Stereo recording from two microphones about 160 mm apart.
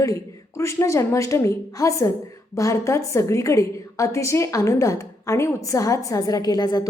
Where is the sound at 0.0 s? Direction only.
20° left (ahead or behind).